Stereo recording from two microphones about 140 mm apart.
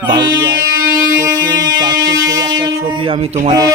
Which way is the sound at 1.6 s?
30° right (ahead or behind).